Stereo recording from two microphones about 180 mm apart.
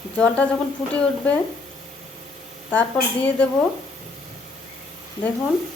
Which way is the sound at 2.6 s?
10° left (ahead or behind).